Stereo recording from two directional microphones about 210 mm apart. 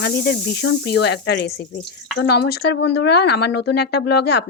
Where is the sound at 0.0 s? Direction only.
50° left (ahead or behind).